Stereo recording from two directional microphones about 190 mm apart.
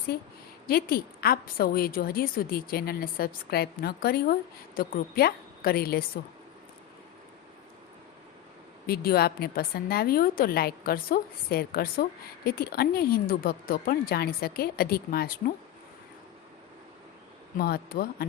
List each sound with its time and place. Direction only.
0.1 s a woman's voice: 55° left (ahead or behind)
8.9 s a woman's voice: 55° left (ahead or behind)
17.6 s a woman's voice: 50° left (ahead or behind)